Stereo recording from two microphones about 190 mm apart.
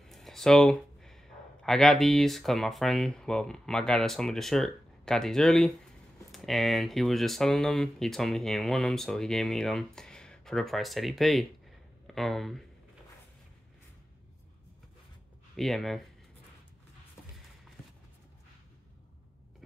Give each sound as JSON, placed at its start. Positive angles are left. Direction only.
{"t": 0.0, "sound": "speech", "side_deg": 0}
{"t": 15.5, "sound": "speech", "side_deg": 0}